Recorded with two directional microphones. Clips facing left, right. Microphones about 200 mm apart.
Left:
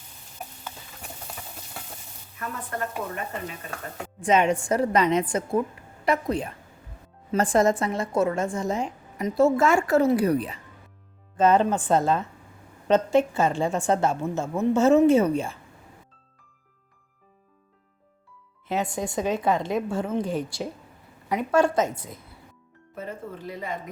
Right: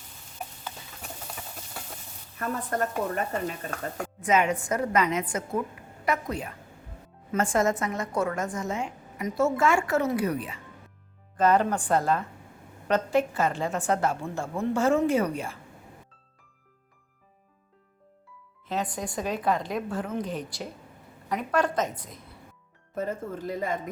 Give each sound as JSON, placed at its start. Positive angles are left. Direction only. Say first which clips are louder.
{"t": 2.4, "sound": "speech", "louder": "right 3 dB", "side_deg": -40}
{"t": 4.2, "sound": "a woman's voice", "louder": "left 3 dB", "side_deg": 30}
{"t": 11.3, "sound": "a woman's voice", "louder": "left 3 dB", "side_deg": 25}
{"t": 18.8, "sound": "a woman's voice", "louder": "left 4 dB", "side_deg": 25}
{"t": 23.0, "sound": "speech", "louder": "right 4 dB", "side_deg": -45}